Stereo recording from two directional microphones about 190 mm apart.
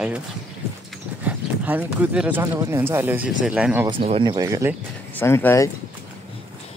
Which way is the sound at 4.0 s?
25° right (ahead or behind).